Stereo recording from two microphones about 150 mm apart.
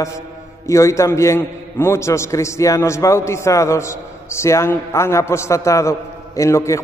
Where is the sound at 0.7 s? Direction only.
20° left (ahead or behind).